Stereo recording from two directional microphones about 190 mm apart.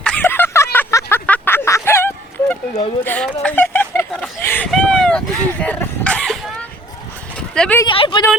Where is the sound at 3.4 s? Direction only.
10° left (ahead or behind).